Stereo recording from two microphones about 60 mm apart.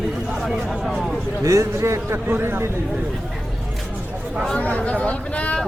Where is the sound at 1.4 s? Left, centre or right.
Right.